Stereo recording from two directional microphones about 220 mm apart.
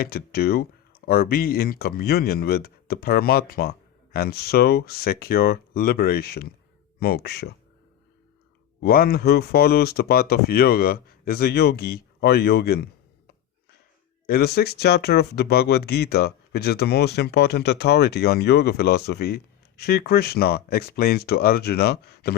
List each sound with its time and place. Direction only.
0.0 s speech: 45° left (ahead or behind)
8.8 s speech: 45° left (ahead or behind)
14.3 s speech: 45° left (ahead or behind)